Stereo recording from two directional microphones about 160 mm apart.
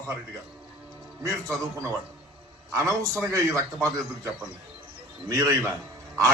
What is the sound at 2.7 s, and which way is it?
A man's voice, 20° right (ahead or behind).